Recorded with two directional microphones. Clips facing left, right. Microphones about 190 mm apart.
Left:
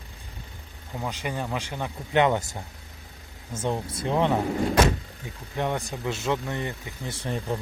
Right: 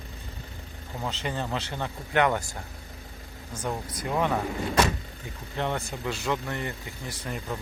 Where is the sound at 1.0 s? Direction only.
10° left (ahead or behind).